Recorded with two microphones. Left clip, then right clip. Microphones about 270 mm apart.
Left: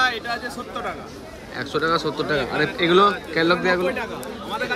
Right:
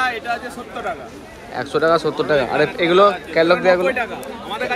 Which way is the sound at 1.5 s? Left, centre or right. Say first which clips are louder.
Right 5 dB; centre.